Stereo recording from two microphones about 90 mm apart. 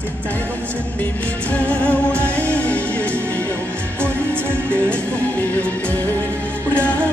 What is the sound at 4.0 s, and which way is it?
Music, 25° right (ahead or behind).